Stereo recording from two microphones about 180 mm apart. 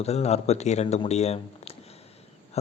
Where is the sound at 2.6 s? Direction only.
35° left (ahead or behind).